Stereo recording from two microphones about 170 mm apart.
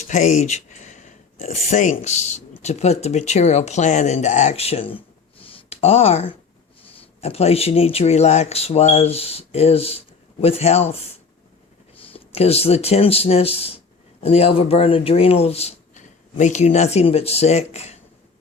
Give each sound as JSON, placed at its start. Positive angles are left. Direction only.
{"t": 0.1, "sound": "speech", "side_deg": 45}
{"t": 12.1, "sound": "speech", "side_deg": 35}